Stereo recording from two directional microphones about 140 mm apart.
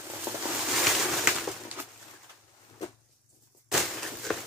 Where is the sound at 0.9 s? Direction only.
10° right (ahead or behind).